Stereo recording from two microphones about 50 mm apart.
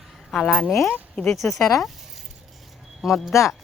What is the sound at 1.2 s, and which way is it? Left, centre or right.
Speech, centre.